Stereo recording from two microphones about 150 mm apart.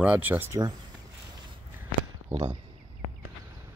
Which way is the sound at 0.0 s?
10° right (ahead or behind).